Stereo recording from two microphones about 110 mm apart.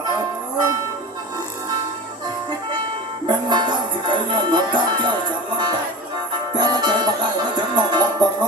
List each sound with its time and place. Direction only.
3.2 s music: 40° right (ahead or behind)
6.5 s music: 40° right (ahead or behind)